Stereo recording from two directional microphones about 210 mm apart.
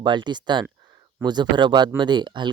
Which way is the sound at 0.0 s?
20° right (ahead or behind).